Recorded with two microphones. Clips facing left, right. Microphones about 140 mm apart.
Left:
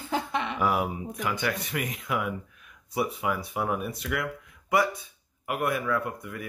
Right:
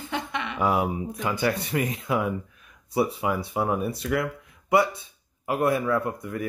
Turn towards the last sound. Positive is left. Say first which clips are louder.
# right 4 dB
turn(degrees=-35)  # may be behind; listen again after turning